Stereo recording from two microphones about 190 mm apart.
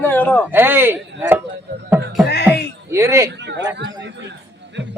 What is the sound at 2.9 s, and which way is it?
Speech, 15° right (ahead or behind).